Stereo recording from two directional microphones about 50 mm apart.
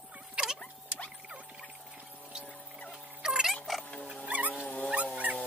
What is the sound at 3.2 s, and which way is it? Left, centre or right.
Frog, centre.